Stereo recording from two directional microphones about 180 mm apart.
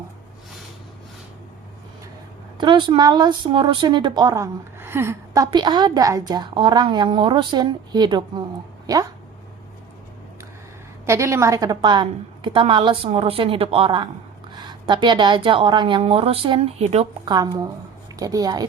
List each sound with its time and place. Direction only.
2.6 s speech: 25° right (ahead or behind)
11.0 s speech: 15° right (ahead or behind); by 17.1 s 35° right (ahead or behind)
17.2 s speech: 25° right (ahead or behind)